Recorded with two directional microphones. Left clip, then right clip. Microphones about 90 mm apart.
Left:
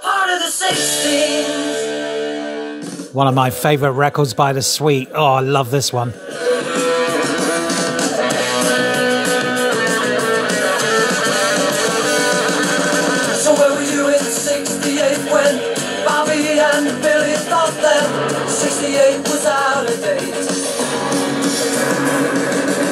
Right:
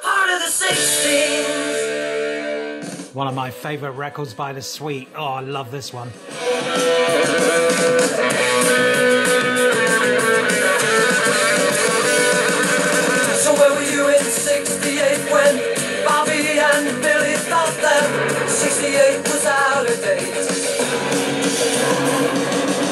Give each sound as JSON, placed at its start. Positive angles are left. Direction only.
{"t": 0.1, "sound": "music", "side_deg": 20}
{"t": 6.8, "sound": "music", "side_deg": 5}
{"t": 21.1, "sound": "music", "side_deg": 5}